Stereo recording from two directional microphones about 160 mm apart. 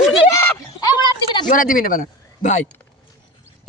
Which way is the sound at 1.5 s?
60° left (ahead or behind).